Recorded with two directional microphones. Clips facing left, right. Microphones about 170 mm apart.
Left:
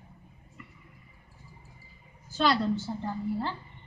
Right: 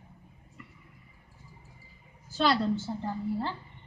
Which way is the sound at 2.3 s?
30° right (ahead or behind).